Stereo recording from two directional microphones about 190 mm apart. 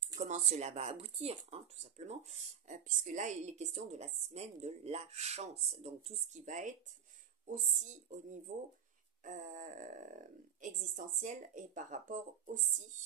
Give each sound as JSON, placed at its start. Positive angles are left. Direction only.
{"t": 0.0, "sound": "speech", "side_deg": -40}